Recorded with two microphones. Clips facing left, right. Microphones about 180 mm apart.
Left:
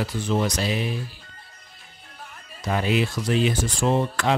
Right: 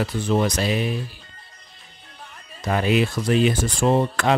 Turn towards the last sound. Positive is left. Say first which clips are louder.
# right 3 dB
turn(degrees=-55)  # may be behind; listen again after turning